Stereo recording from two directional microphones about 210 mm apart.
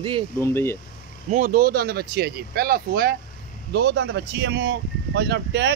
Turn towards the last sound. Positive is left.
turn(degrees=-55)  # may be behind; listen again after turning